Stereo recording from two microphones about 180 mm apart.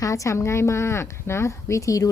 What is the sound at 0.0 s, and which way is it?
A woman's voice, 20° left (ahead or behind).